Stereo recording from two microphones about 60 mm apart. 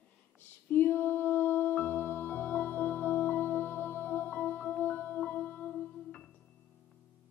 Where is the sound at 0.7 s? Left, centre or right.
Left.